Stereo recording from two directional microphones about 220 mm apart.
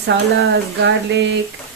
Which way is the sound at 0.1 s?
45° right (ahead or behind).